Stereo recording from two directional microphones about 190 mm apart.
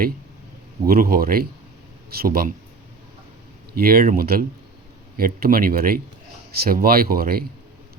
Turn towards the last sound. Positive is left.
turn(degrees=-50)  # may be behind; listen again after turning